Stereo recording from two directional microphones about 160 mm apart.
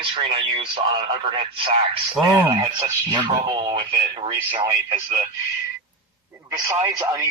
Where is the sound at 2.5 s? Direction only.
20° right (ahead or behind).